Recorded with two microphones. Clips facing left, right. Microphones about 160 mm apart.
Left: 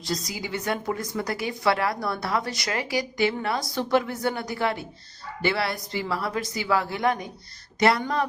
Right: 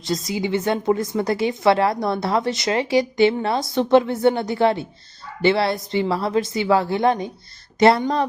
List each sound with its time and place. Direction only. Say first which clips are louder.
0.1 s a woman's voice: right 8 dB; 25° right (ahead or behind)